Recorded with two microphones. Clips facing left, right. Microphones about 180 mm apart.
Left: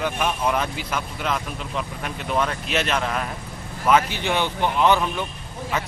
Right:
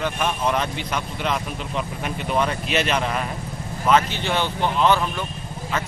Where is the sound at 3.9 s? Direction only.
10° left (ahead or behind).